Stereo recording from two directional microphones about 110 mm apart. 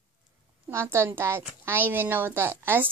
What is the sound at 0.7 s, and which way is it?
A woman's voice, 25° right (ahead or behind).